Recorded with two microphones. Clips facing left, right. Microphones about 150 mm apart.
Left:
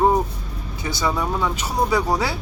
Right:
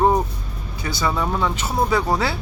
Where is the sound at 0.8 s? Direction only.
15° left (ahead or behind).